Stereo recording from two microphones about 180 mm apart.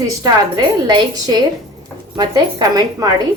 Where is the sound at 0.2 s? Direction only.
20° right (ahead or behind).